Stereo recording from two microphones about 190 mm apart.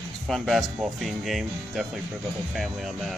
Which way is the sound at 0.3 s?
Centre (ahead or behind).